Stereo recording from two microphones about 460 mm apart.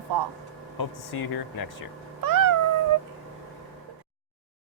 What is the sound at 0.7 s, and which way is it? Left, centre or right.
Speech, left.